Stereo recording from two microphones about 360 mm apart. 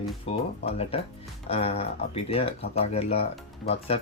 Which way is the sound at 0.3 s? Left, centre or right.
Centre.